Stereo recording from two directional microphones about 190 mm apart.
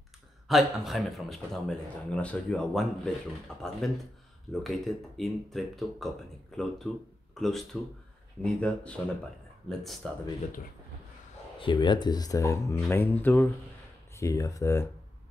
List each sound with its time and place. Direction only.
0.5 s speech: centre (ahead or behind)
11.6 s speech: 25° left (ahead or behind)